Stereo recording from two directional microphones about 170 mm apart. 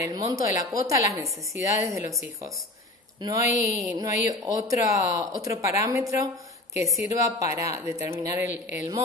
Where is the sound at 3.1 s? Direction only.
20° right (ahead or behind).